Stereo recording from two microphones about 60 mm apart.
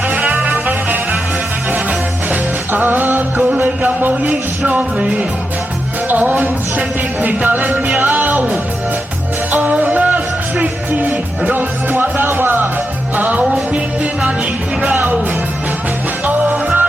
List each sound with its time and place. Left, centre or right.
0.1 s music: right
13.4 s music: centre
16.2 s music: right